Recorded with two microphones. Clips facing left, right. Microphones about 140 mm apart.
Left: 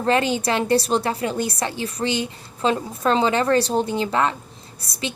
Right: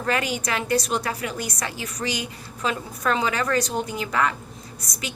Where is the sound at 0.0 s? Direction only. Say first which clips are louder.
Left 5 dB; 30° left (ahead or behind).